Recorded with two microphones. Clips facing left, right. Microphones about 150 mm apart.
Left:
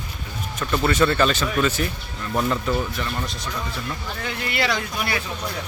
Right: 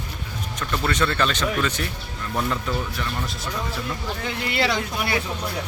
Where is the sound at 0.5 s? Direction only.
10° left (ahead or behind).